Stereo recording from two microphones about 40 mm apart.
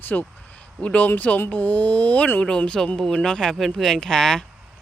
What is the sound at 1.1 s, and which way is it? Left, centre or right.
Speech, left.